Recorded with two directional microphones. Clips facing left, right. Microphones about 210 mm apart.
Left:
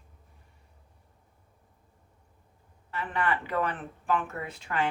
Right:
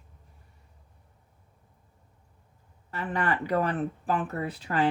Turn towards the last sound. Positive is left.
turn(degrees=-35)  # may be behind; listen again after turning